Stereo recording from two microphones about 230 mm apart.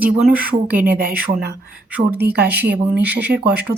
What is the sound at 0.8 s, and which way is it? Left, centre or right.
Speech, right.